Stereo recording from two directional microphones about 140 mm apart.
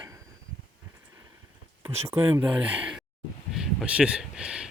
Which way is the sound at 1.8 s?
20° right (ahead or behind).